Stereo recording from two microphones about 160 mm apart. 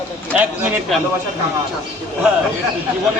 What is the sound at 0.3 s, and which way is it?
Speech, 5° right (ahead or behind).